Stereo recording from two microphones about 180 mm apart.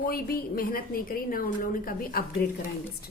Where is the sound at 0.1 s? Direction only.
55° left (ahead or behind).